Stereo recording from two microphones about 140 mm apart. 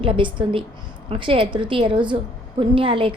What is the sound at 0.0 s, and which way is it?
A woman's voice, 35° right (ahead or behind).